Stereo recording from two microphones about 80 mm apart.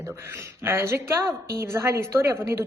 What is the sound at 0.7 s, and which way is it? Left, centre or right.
A woman's voice, right.